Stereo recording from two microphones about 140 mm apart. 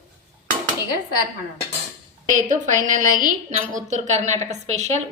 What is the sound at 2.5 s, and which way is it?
A woman's voice, 65° right (ahead or behind).